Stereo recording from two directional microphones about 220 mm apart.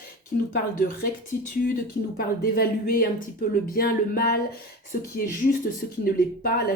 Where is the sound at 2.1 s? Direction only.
40° left (ahead or behind).